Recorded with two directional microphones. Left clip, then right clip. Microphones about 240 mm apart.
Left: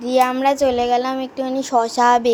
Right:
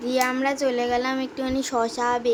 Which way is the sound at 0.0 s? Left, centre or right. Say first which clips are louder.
Left 7 dB; centre.